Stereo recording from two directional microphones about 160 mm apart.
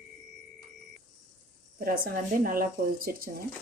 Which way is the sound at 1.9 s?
60° right (ahead or behind).